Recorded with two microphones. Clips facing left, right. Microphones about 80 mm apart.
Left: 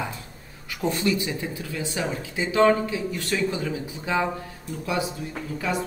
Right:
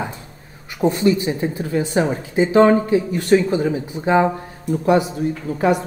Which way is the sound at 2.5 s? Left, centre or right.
Right.